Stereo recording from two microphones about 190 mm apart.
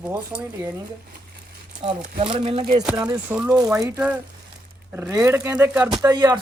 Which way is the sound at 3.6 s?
15° right (ahead or behind).